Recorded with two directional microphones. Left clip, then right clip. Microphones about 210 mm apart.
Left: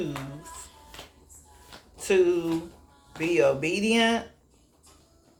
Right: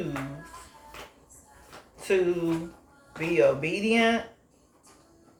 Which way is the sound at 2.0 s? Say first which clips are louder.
Left 3 dB; 45° left (ahead or behind).